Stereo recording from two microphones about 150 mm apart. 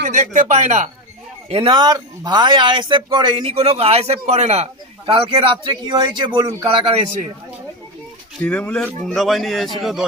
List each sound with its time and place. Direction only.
0.0 s speech: 55° right (ahead or behind)
1.5 s speech: 35° right (ahead or behind)
8.4 s speech: 5° left (ahead or behind)